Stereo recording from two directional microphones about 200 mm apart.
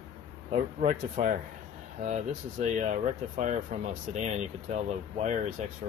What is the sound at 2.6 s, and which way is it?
Speech, 40° right (ahead or behind).